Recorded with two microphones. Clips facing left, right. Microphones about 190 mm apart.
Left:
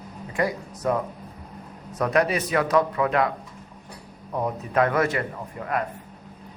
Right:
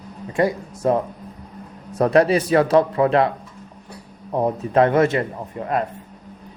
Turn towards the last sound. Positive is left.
turn(degrees=-25)  # may be behind; listen again after turning